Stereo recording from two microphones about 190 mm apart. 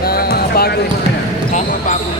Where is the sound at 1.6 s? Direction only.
35° left (ahead or behind).